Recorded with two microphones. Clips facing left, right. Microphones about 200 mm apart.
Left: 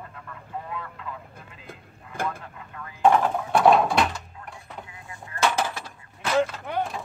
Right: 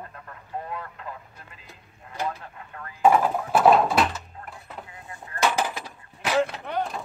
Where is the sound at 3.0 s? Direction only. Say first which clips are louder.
Even; 5° right (ahead or behind).